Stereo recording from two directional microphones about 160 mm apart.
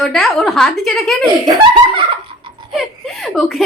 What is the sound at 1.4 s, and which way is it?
Speech, 30° right (ahead or behind).